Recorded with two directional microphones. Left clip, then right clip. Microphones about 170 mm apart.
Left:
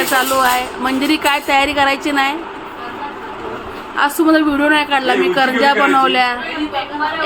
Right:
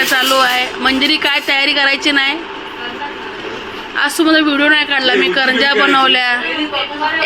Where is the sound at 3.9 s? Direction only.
10° left (ahead or behind).